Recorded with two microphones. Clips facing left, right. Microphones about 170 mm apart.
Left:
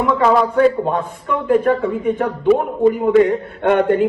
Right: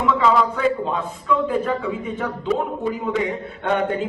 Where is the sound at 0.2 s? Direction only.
60° left (ahead or behind).